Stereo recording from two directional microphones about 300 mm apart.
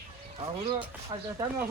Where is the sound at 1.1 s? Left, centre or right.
Centre.